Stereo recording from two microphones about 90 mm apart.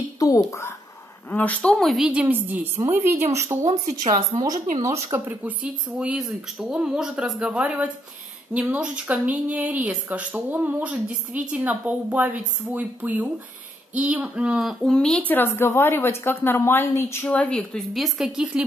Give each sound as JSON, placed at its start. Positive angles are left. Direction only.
{"t": 0.2, "sound": "speech", "side_deg": 40}
{"t": 1.3, "sound": "speech", "side_deg": 15}
{"t": 2.0, "sound": "a woman's voice", "side_deg": -15}
{"t": 4.1, "sound": "a woman's voice", "side_deg": -45}
{"t": 5.4, "sound": "a woman's voice", "side_deg": -15}
{"t": 15.2, "sound": "a woman's voice", "side_deg": 25}
{"t": 17.3, "sound": "speech", "side_deg": 15}